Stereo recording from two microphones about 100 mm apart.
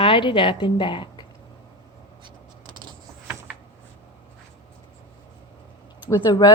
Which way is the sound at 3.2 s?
15° right (ahead or behind).